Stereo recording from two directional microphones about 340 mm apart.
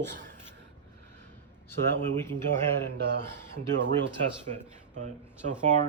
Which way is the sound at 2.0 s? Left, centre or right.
Centre.